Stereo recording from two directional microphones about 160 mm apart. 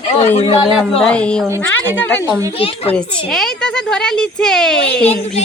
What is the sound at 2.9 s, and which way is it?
Speech, 5° left (ahead or behind).